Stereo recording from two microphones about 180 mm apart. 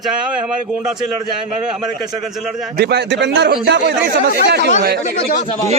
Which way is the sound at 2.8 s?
65° right (ahead or behind).